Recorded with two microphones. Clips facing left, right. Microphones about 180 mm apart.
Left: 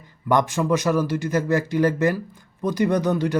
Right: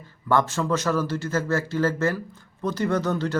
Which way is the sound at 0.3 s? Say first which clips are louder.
Left 2 dB; 15° left (ahead or behind).